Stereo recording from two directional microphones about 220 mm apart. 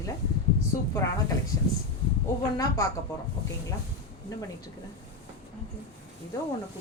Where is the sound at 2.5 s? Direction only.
15° left (ahead or behind).